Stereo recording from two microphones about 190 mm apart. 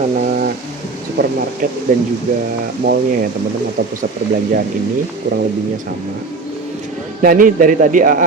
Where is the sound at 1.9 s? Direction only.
45° right (ahead or behind).